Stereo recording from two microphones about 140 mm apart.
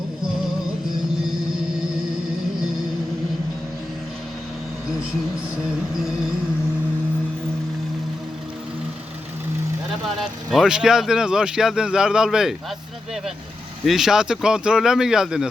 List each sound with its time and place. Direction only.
10.2 s speech: centre (ahead or behind)
13.8 s speech: 5° right (ahead or behind)